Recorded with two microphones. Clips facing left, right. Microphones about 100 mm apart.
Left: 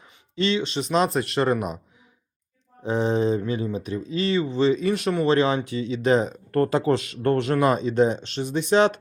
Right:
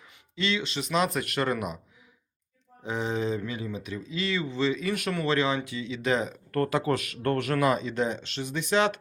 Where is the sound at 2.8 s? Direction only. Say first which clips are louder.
Left 7 dB; 35° left (ahead or behind).